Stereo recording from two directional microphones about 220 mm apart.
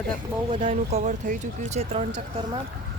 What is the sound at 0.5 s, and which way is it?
Speech, 30° right (ahead or behind).